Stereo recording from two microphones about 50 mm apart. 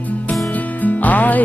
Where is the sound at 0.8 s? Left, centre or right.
Left.